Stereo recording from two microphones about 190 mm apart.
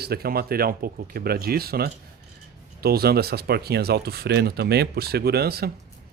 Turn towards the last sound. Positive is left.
turn(degrees=-55)  # may be behind; listen again after turning